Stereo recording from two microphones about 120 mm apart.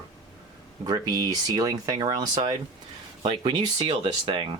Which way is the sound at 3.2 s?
45° right (ahead or behind).